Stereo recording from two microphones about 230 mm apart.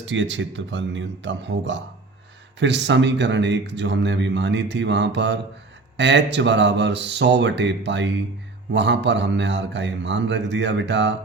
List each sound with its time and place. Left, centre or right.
0.0 s speech: right